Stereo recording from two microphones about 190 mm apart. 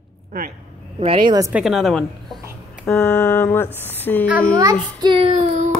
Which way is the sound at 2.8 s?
5° left (ahead or behind).